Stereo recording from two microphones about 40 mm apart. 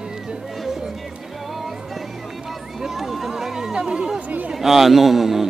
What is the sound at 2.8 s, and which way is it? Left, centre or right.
Chatter, centre.